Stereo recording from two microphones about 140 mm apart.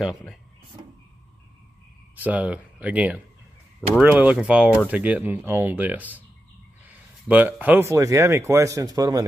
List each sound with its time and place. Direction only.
2.1 s speech: 10° right (ahead or behind); by 9.2 s 25° right (ahead or behind)